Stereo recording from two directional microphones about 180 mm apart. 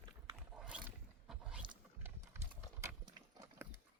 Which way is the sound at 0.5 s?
5° right (ahead or behind).